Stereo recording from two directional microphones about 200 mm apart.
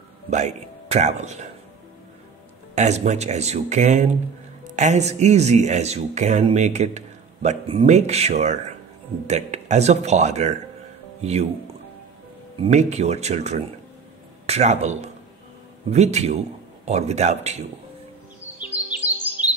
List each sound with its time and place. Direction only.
0.3 s speech: 35° right (ahead or behind)
2.7 s speech: 35° right (ahead or behind)
12.5 s speech: 35° right (ahead or behind)
19.0 s music: 10° right (ahead or behind)